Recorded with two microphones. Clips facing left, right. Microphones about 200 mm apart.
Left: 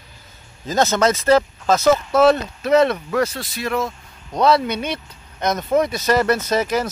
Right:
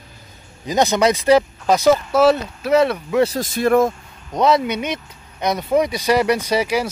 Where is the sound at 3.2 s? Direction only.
40° right (ahead or behind).